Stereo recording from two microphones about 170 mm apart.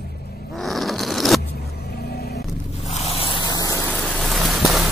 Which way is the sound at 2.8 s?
35° left (ahead or behind).